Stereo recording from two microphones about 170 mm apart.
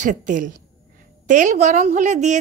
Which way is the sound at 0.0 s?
50° right (ahead or behind).